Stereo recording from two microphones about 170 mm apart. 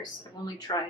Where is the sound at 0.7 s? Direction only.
25° left (ahead or behind).